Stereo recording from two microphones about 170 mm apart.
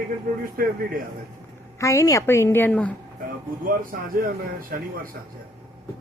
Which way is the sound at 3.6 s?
55° right (ahead or behind).